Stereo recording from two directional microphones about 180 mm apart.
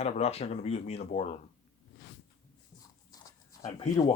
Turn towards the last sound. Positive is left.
turn(degrees=20)  # may be behind; listen again after turning